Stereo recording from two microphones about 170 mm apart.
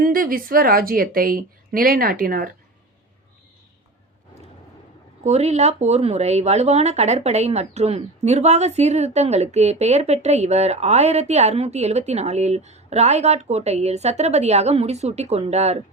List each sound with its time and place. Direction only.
0.0 s speech: 55° right (ahead or behind)
5.2 s speech: 40° right (ahead or behind)